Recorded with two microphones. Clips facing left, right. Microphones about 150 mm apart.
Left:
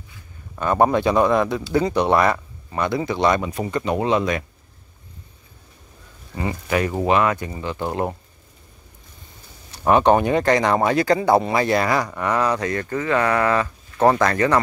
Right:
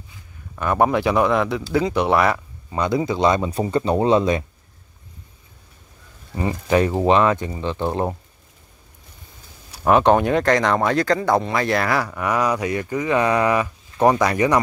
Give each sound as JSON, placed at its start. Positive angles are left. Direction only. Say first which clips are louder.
{"t": 0.6, "sound": "speech", "louder": "left 1 dB", "side_deg": -5}
{"t": 2.7, "sound": "speech", "louder": "right 2 dB", "side_deg": -20}
{"t": 6.3, "sound": "speech", "louder": "right 4 dB", "side_deg": -25}
{"t": 9.8, "sound": "speech", "louder": "even", "side_deg": 0}